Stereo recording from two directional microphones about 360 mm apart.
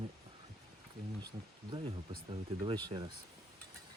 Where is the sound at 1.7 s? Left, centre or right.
Centre.